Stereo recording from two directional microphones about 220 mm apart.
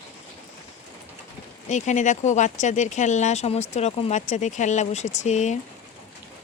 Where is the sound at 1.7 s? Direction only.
35° left (ahead or behind).